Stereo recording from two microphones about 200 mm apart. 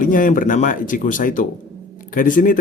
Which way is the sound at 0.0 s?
40° left (ahead or behind).